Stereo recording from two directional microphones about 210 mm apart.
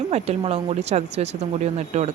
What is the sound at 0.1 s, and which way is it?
A woman's voice, 30° right (ahead or behind).